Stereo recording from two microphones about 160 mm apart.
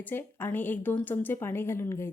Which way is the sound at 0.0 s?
10° left (ahead or behind).